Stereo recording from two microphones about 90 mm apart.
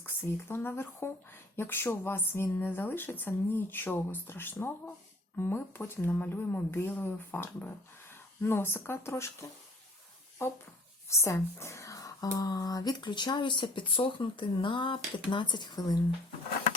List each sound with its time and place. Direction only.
0.0 s speech: 25° left (ahead or behind)
11.1 s speech: 35° left (ahead or behind); by 16.0 s 50° left (ahead or behind)